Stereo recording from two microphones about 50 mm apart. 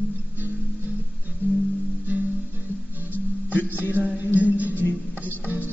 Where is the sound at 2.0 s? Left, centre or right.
Right.